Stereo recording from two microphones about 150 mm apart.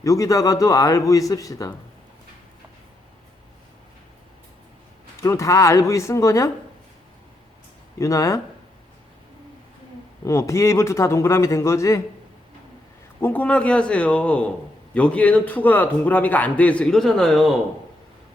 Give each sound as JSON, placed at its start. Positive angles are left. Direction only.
{"t": 0.0, "sound": "a man's voice", "side_deg": 20}
{"t": 5.2, "sound": "a man's voice", "side_deg": 20}
{"t": 7.9, "sound": "a man's voice", "side_deg": 20}
{"t": 10.2, "sound": "a man's voice", "side_deg": 20}
{"t": 13.2, "sound": "a man's voice", "side_deg": 10}